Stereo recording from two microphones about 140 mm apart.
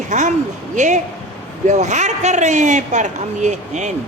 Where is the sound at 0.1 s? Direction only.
60° right (ahead or behind).